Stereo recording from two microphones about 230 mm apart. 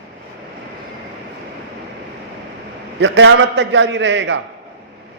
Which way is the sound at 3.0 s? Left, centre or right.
Right.